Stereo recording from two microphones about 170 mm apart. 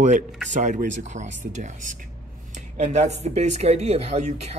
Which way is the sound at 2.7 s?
40° right (ahead or behind).